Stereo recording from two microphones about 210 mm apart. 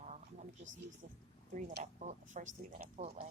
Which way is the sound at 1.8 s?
35° right (ahead or behind).